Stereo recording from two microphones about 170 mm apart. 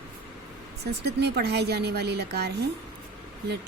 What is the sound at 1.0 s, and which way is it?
A woman's voice, 75° right (ahead or behind).